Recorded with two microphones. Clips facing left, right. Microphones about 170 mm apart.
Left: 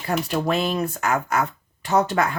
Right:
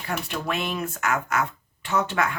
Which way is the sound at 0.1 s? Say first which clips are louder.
Left 6 dB; 35° left (ahead or behind).